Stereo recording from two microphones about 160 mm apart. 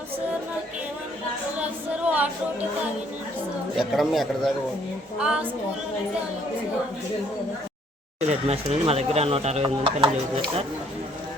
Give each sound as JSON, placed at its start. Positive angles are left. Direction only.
{"t": 1.5, "sound": "a sound", "side_deg": -10}
{"t": 3.8, "sound": "a man's voice", "side_deg": 0}
{"t": 8.3, "sound": "speech", "side_deg": -40}